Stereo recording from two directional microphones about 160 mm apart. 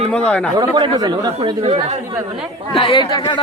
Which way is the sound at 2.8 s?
30° left (ahead or behind).